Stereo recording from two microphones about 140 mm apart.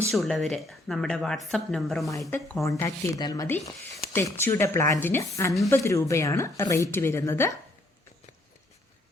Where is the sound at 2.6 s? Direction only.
20° left (ahead or behind).